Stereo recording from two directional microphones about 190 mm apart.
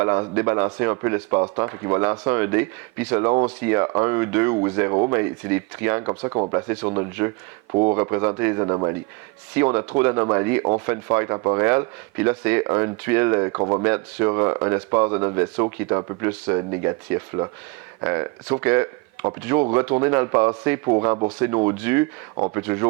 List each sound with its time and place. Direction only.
0.0 s speech: 15° right (ahead or behind)
5.1 s speech: 15° right (ahead or behind)
7.7 s speech: 30° right (ahead or behind)
7.9 s speech: 15° right (ahead or behind)
13.8 s speech: 15° right (ahead or behind)